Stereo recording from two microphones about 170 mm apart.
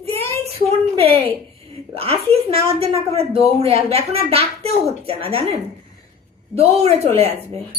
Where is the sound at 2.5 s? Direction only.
35° right (ahead or behind).